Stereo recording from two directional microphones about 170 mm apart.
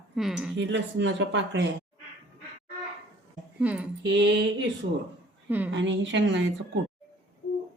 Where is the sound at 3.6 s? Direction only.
10° right (ahead or behind).